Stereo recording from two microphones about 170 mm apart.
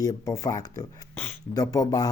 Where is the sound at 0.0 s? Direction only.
20° left (ahead or behind).